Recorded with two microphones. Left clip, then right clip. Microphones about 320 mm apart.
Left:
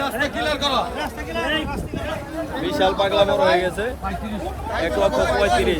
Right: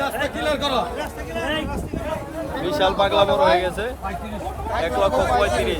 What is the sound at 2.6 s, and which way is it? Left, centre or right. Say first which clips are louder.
Speech: even; centre.